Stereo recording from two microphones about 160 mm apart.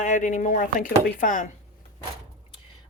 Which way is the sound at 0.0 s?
50° left (ahead or behind).